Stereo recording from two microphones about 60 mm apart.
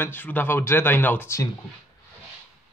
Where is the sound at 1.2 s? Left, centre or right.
Left.